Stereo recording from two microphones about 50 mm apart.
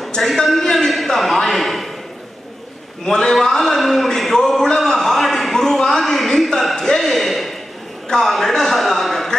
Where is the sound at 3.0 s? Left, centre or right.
Centre.